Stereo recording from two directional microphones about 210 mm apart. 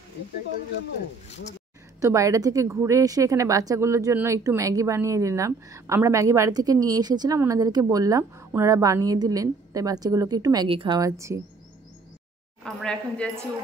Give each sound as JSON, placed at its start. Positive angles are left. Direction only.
{"t": 2.0, "sound": "a woman's voice", "side_deg": -15}
{"t": 12.6, "sound": "a woman's voice", "side_deg": 5}